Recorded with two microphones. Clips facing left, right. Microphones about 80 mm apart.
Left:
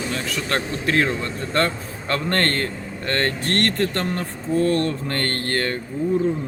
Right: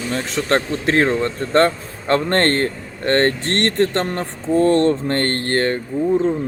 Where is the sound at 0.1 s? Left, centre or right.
Right.